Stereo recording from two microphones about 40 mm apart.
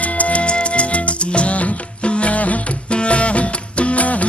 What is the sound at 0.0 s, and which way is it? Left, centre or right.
Music, left.